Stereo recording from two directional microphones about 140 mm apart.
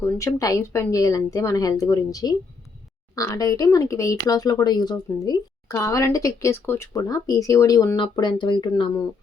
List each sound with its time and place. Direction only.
0.0 s speech: 25° left (ahead or behind)